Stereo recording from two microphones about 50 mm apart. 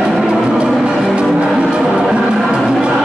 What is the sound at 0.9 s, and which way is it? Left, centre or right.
Music, centre.